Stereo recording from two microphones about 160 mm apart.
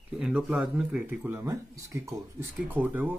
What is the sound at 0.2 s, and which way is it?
Speech, 5° right (ahead or behind).